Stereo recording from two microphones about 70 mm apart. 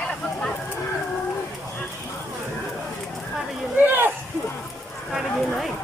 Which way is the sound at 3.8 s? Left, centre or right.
Right.